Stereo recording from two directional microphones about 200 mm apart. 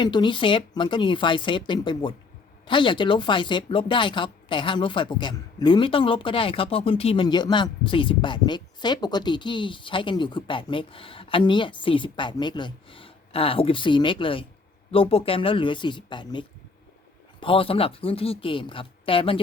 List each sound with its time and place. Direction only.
0.0 s speech: 25° left (ahead or behind)